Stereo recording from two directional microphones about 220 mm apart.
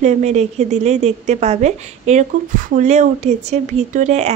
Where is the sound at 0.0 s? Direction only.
30° right (ahead or behind).